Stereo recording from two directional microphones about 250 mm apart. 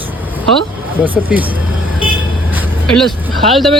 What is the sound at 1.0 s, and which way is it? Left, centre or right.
Speech, centre.